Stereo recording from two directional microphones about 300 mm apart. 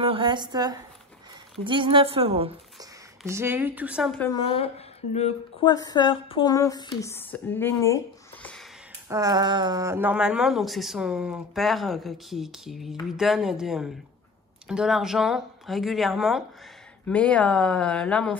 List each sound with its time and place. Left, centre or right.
0.0 s speech: centre
3.3 s speech: centre
5.1 s speech: centre
9.1 s speech: centre